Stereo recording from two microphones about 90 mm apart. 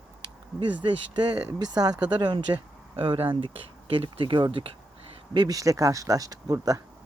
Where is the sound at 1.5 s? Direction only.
50° right (ahead or behind).